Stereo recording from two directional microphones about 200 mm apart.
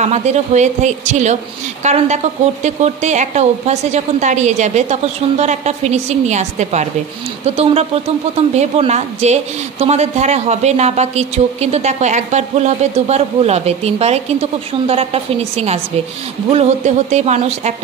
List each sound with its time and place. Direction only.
0.0 s speech: 35° right (ahead or behind)